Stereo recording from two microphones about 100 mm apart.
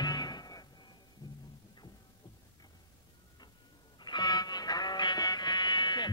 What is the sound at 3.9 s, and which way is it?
Music, 45° left (ahead or behind).